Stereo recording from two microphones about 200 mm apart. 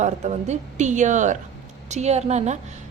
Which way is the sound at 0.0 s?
35° right (ahead or behind).